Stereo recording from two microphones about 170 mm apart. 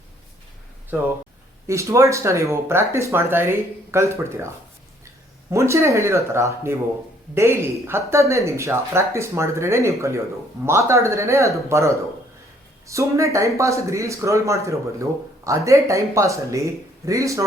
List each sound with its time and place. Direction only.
0.9 s speech: 10° right (ahead or behind)
5.5 s speech: 15° right (ahead or behind)